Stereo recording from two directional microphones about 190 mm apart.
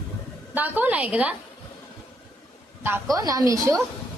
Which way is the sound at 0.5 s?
10° right (ahead or behind).